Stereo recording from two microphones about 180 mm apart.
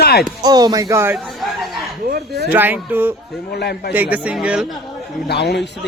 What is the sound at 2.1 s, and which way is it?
Speech, 65° right (ahead or behind).